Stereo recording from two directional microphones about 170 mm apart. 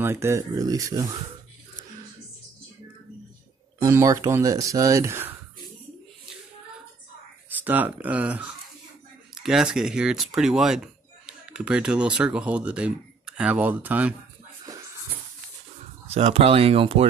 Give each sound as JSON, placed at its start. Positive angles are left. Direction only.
{"t": 0.0, "sound": "speech", "side_deg": -15}
{"t": 3.8, "sound": "speech", "side_deg": -20}
{"t": 7.4, "sound": "speech", "side_deg": -10}
{"t": 16.1, "sound": "speech", "side_deg": -40}